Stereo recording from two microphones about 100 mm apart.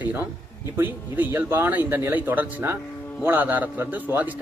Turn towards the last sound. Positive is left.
turn(degrees=-15)  # may be behind; listen again after turning